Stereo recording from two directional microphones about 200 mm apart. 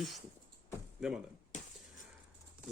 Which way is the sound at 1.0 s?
5° right (ahead or behind).